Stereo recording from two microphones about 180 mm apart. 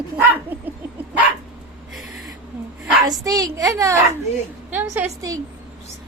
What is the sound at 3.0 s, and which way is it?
A woman's voice, 20° right (ahead or behind).